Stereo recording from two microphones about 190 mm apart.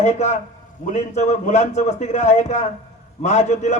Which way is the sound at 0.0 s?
35° left (ahead or behind).